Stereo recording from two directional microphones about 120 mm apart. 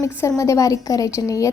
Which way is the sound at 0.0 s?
25° left (ahead or behind).